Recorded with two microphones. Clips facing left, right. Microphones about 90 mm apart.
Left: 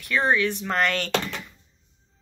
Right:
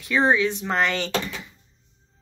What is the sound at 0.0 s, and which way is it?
Speech, 20° right (ahead or behind).